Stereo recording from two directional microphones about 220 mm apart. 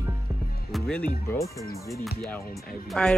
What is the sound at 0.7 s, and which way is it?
Speech, 5° left (ahead or behind).